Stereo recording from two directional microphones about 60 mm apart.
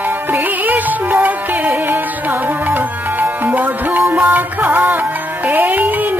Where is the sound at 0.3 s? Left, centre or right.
Right.